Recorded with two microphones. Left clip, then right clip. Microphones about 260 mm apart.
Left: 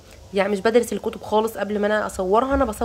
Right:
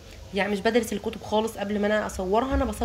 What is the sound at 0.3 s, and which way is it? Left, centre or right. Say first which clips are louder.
Speech: left 5 dB; centre.